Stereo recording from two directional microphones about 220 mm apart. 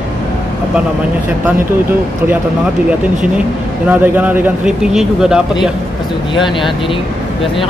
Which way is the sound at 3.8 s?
10° right (ahead or behind).